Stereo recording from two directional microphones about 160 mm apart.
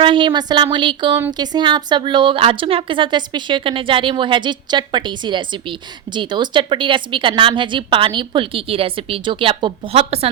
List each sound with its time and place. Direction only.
0.0 s a woman's voice: 30° right (ahead or behind)